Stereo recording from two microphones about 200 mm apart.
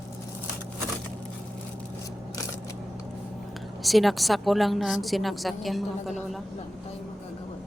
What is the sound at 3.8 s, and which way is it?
A woman's voice, centre (ahead or behind).